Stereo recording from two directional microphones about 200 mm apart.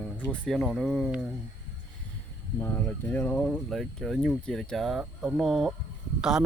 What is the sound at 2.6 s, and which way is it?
Speech, 10° left (ahead or behind).